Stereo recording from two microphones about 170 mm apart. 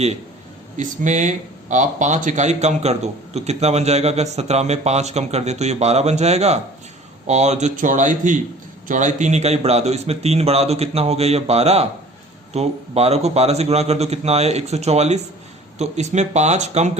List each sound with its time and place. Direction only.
0.8 s speech: 45° right (ahead or behind)